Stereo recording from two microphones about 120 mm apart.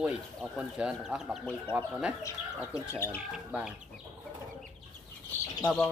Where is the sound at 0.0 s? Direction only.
10° right (ahead or behind).